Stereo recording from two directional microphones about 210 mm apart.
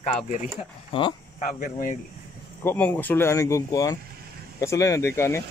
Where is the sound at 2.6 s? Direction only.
10° left (ahead or behind).